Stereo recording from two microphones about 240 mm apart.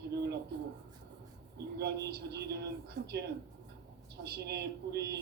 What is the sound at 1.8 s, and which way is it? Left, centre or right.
Speech, right.